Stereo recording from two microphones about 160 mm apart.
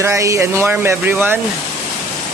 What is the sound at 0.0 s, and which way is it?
Speech, 15° right (ahead or behind).